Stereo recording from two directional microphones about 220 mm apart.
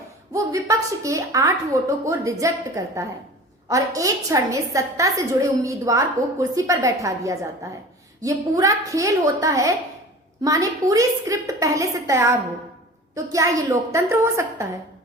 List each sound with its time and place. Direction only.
0.3 s a woman's voice: 15° right (ahead or behind)